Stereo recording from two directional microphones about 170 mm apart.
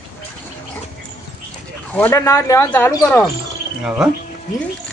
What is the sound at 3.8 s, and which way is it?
Speech, 5° right (ahead or behind).